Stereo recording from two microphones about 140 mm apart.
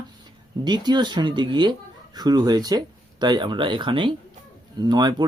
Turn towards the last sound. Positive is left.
turn(degrees=-30)  # may be behind; listen again after turning